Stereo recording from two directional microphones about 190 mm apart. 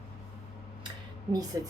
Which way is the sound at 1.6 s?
15° right (ahead or behind).